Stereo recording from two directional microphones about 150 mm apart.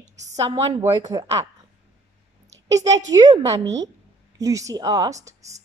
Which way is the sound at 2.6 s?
25° right (ahead or behind).